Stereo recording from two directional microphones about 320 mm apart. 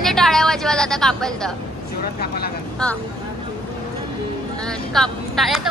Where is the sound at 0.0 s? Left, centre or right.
Centre.